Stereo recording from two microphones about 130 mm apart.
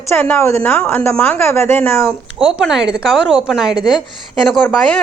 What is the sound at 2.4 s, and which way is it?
A woman's voice, 5° right (ahead or behind).